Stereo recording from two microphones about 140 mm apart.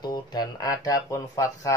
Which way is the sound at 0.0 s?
30° left (ahead or behind).